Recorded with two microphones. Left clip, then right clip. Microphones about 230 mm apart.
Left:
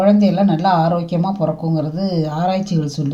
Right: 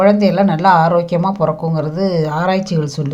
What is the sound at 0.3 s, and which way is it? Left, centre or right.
Speech, right.